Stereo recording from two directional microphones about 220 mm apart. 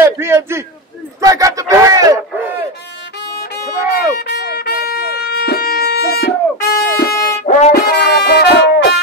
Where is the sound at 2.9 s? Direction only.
50° left (ahead or behind).